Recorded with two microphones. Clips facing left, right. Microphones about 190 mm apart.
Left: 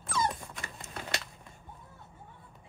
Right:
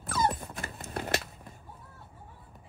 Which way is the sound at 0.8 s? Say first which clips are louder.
Right 7 dB; 60° right (ahead or behind).